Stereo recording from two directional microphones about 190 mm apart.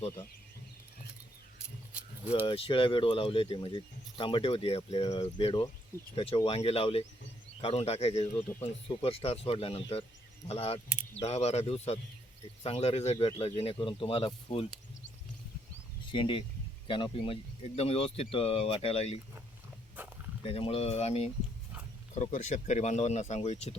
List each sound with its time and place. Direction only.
2.5 s speech: 25° left (ahead or behind)
8.4 s speech: 10° left (ahead or behind)
8.6 s speech: 30° left (ahead or behind)
16.1 s speech: 25° left (ahead or behind)
20.4 s speech: 30° left (ahead or behind)